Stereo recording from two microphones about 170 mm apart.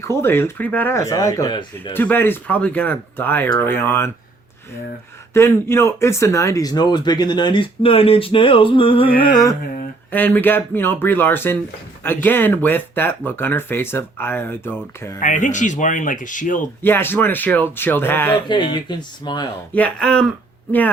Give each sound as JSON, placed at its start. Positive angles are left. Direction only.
{"t": 0.1, "sound": "speech", "side_deg": 15}
{"t": 1.9, "sound": "speech", "side_deg": 10}
{"t": 5.3, "sound": "speech", "side_deg": 15}
{"t": 10.1, "sound": "speech", "side_deg": 10}
{"t": 15.2, "sound": "speech", "side_deg": 45}
{"t": 16.8, "sound": "speech", "side_deg": 10}
{"t": 18.4, "sound": "speech", "side_deg": 25}
{"t": 19.7, "sound": "speech", "side_deg": 5}